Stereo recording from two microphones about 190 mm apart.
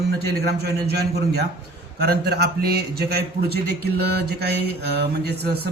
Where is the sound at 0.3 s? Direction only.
55° right (ahead or behind).